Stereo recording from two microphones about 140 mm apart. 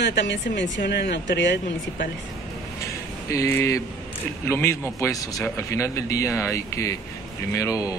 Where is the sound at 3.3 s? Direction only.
20° left (ahead or behind).